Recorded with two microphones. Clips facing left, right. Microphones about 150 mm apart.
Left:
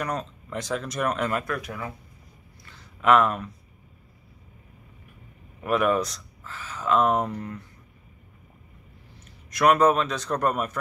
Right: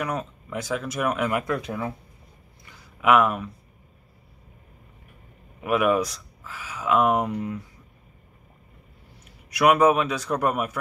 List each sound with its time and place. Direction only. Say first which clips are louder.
0.0 s speech: right 1 dB; 5° right (ahead or behind)
1.4 s speech: right 4 dB; 20° right (ahead or behind)
2.6 s a sound: right 1 dB; 10° right (ahead or behind)
5.6 s speech: right 1 dB; 5° right (ahead or behind)
9.5 s speech: right 1 dB; 10° right (ahead or behind)